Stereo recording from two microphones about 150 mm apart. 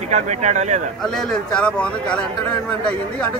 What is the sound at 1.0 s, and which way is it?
A man's voice, 5° left (ahead or behind).